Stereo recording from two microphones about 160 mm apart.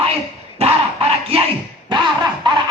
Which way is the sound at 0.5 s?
40° right (ahead or behind).